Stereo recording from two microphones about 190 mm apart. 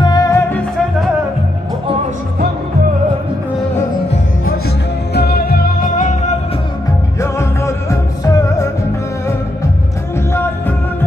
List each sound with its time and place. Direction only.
0.0 s music: 20° left (ahead or behind)
5.1 s music: 55° left (ahead or behind)
7.2 s music: 15° left (ahead or behind)